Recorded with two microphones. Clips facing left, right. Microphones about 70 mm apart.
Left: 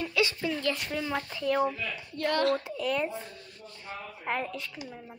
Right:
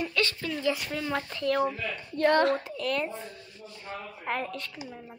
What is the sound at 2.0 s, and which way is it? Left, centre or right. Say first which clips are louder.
Speech: right 4 dB; right.